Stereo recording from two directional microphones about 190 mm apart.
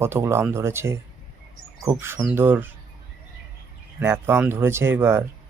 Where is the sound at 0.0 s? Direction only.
15° right (ahead or behind).